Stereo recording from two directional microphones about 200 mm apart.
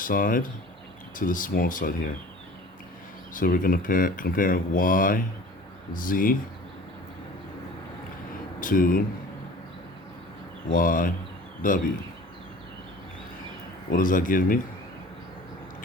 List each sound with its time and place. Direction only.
0.0 s speech: 45° left (ahead or behind)
3.3 s speech: 45° left (ahead or behind)
8.6 s speech: 45° left (ahead or behind)
10.7 s speech: 45° left (ahead or behind)
13.9 s speech: 40° left (ahead or behind)